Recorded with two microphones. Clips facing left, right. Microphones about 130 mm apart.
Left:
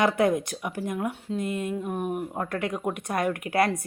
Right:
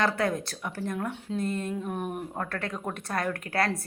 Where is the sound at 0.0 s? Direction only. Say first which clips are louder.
Left 5 dB; 20° left (ahead or behind).